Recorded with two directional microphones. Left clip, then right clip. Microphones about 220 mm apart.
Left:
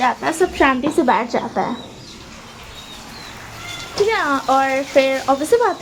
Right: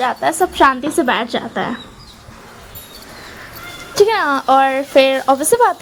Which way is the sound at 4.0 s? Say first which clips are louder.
Right 4 dB; 40° right (ahead or behind).